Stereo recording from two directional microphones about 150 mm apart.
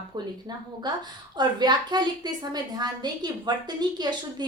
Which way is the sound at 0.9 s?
30° right (ahead or behind).